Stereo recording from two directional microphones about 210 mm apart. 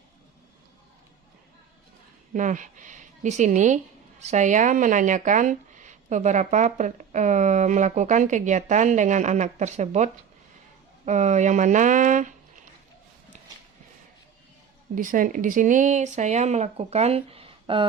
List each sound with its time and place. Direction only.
2.3 s speech: 35° right (ahead or behind)
14.9 s speech: 40° right (ahead or behind)